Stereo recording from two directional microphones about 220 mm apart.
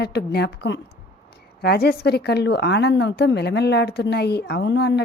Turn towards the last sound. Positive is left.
turn(degrees=55)  # may be behind; listen again after turning